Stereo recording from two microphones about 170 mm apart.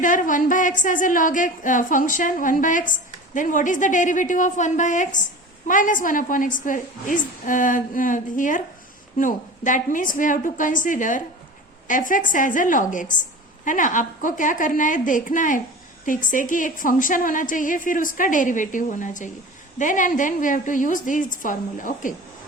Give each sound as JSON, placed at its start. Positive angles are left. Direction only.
{"t": 0.0, "sound": "a woman's voice", "side_deg": 50}